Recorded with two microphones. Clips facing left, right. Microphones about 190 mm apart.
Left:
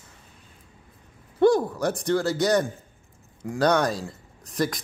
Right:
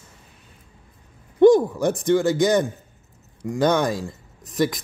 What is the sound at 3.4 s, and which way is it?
Speech, centre (ahead or behind).